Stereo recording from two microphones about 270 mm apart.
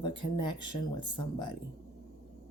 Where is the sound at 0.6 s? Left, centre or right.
Left.